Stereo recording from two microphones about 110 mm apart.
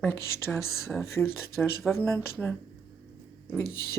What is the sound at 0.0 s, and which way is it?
Speech, 25° left (ahead or behind).